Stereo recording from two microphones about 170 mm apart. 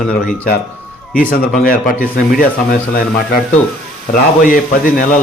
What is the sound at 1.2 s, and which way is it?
Speech, 55° left (ahead or behind).